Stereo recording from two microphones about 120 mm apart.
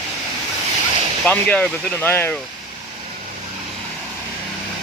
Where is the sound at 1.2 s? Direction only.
10° left (ahead or behind).